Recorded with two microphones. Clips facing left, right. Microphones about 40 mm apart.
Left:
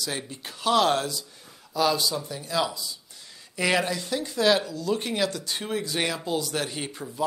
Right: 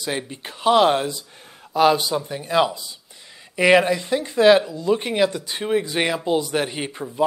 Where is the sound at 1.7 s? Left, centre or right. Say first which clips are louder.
Right 7 dB; right.